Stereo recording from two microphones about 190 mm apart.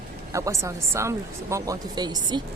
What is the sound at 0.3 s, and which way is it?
Speech, 15° right (ahead or behind).